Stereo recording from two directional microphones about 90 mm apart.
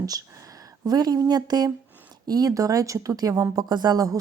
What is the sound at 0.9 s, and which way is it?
Speech, 45° right (ahead or behind).